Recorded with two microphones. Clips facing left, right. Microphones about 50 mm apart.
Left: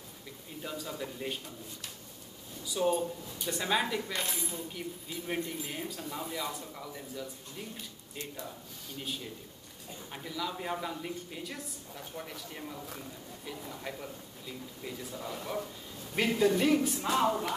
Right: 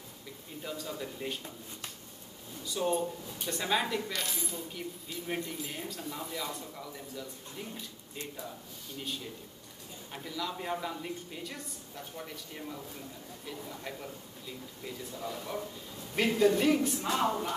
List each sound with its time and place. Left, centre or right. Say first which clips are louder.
0.6 s a woman's voice: even; centre
2.6 s a woman's voice: left 1 dB; centre
4.1 s speech: left 1 dB; left
5.1 s a woman's voice: left 1 dB; centre
9.0 s a woman's voice: even; centre
15.1 s a woman's voice: left 1 dB; centre